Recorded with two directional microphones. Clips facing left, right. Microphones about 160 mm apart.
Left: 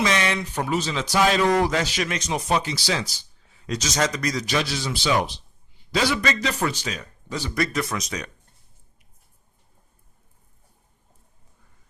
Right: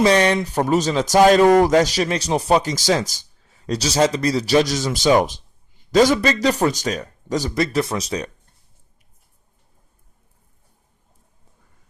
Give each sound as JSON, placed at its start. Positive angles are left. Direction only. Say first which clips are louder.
{"t": 0.0, "sound": "speech", "louder": "right 8 dB", "side_deg": -35}
{"t": 7.5, "sound": "speech", "louder": "right 2 dB", "side_deg": -25}